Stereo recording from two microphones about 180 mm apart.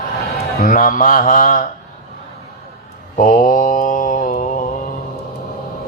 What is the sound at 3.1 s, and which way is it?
Mantra, 50° left (ahead or behind).